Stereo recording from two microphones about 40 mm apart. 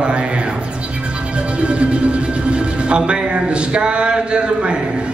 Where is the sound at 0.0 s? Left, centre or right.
Right.